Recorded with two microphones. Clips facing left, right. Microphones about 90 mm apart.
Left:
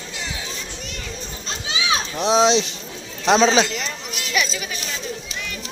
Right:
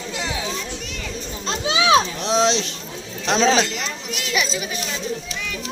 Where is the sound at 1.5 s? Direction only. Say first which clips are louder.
Right 8 dB; 70° right (ahead or behind).